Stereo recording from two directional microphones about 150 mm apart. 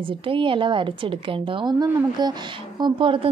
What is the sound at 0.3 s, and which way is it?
A woman's voice, 35° right (ahead or behind).